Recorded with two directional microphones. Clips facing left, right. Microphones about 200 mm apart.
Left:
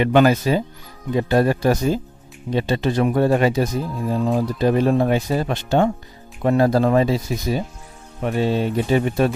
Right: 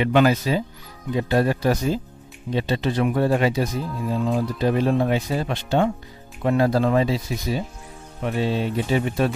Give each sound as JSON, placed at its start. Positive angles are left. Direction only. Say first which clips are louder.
{"t": 0.0, "sound": "speech", "louder": "left 3 dB", "side_deg": 50}